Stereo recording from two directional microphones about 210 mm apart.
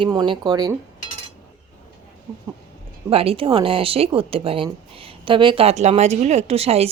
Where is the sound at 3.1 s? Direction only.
25° right (ahead or behind).